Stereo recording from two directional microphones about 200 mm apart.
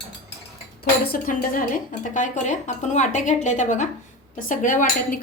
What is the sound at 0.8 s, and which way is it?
Speech, 50° left (ahead or behind).